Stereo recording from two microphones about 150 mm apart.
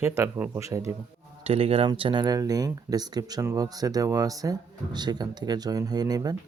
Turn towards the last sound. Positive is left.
turn(degrees=-25)  # may be behind; listen again after turning